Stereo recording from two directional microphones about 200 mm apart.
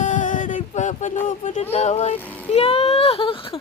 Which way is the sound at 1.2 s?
40° left (ahead or behind).